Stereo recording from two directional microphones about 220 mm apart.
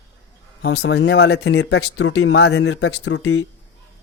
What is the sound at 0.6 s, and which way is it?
Speech, 50° left (ahead or behind).